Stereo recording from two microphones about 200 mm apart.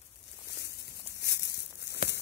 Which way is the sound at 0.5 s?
55° left (ahead or behind).